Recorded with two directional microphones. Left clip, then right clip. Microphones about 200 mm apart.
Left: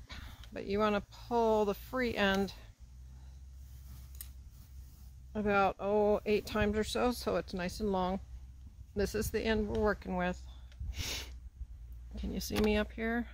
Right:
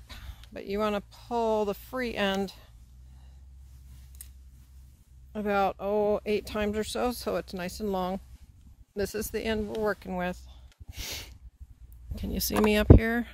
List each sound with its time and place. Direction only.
0.1 s speech: 50° right (ahead or behind)
5.3 s speech: 50° right (ahead or behind)
12.2 s speech: 55° right (ahead or behind)